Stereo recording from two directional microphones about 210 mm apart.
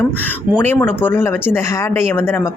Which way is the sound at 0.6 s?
10° left (ahead or behind).